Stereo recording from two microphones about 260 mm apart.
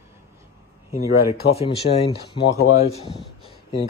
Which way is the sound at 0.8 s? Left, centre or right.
Centre.